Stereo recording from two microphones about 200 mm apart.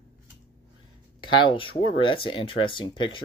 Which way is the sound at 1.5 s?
25° left (ahead or behind).